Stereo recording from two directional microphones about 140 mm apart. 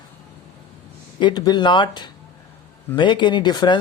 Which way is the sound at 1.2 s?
30° left (ahead or behind).